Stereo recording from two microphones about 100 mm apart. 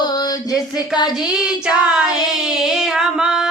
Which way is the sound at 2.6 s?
5° right (ahead or behind).